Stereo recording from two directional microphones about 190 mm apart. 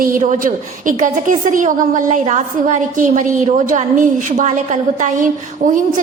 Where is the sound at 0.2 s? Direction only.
40° right (ahead or behind).